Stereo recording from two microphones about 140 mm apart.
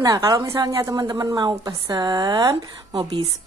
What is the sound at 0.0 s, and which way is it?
A woman's voice, 25° right (ahead or behind).